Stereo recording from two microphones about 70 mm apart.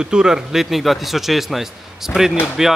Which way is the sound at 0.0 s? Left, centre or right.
Centre.